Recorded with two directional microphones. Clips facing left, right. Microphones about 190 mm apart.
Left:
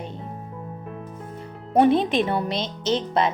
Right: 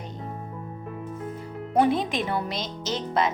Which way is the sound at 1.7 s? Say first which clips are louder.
Left 5 dB; 25° left (ahead or behind).